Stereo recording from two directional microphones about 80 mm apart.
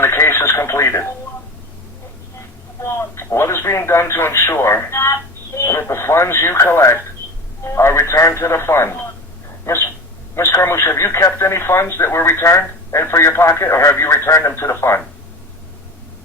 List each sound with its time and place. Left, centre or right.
0.0 s radio: left
2.8 s speech: left